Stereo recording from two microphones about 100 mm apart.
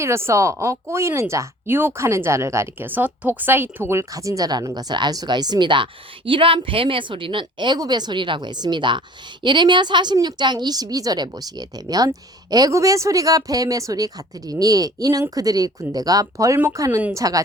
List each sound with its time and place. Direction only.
0.0 s speech: 25° right (ahead or behind)